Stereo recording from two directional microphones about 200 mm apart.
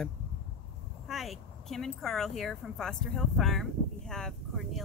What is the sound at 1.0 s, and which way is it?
A woman's voice, centre (ahead or behind).